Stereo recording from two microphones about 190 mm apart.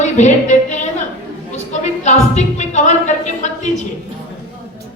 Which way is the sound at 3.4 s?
40° left (ahead or behind).